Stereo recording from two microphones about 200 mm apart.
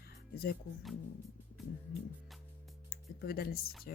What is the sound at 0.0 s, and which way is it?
Music, 50° left (ahead or behind).